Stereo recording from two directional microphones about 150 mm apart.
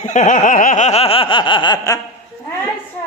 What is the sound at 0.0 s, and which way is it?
Snicker, 55° left (ahead or behind).